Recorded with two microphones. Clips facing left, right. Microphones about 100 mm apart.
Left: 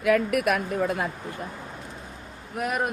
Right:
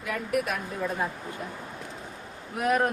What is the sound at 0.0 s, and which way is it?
Speech, 75° left (ahead or behind).